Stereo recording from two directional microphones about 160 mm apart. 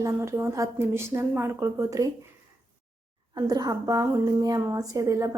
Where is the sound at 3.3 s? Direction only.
25° right (ahead or behind).